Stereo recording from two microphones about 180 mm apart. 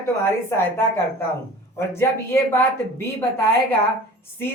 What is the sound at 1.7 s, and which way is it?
Speech, 15° left (ahead or behind).